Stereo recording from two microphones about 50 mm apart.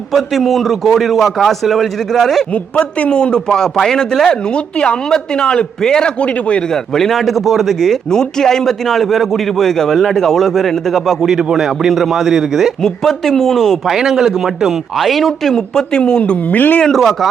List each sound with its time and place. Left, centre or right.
0.1 s speech: centre
2.5 s a man's voice: left
4.5 s a man's voice: left
6.7 s speech: centre
11.3 s speech: centre
12.8 s a man's voice: centre
13.8 s speech: centre
16.5 s speech: left
16.8 s speech: centre